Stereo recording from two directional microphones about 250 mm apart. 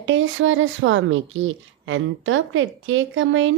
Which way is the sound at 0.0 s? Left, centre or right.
Right.